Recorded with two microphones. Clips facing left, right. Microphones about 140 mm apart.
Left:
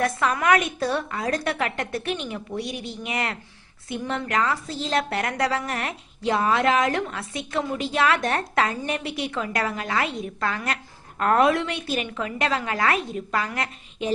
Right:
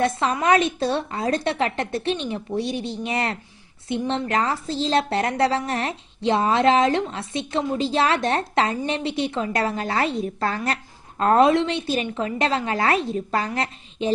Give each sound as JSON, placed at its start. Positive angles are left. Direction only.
{"t": 0.0, "sound": "a woman's voice", "side_deg": -25}